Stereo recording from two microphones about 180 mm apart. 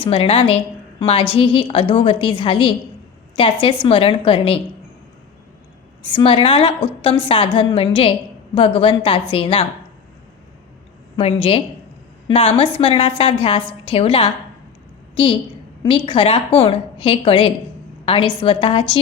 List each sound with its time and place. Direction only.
0.0 s a woman's voice: 30° left (ahead or behind)
6.1 s a woman's voice: 30° left (ahead or behind)
11.2 s a woman's voice: 30° left (ahead or behind)